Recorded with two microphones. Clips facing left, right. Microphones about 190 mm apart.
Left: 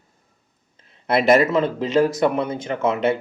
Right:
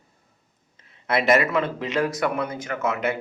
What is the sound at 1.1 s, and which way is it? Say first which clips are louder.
Speech: left 4 dB; 30° left (ahead or behind).